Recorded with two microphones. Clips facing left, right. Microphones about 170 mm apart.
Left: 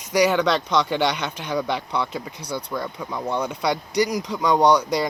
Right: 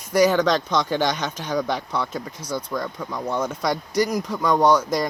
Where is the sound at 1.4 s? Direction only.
15° left (ahead or behind).